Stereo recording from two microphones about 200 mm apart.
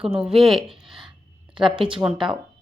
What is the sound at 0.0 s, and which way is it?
Speech, 5° right (ahead or behind).